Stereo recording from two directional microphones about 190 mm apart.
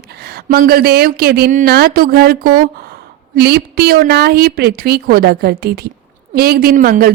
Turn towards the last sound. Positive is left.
turn(degrees=-50)  # may be behind; listen again after turning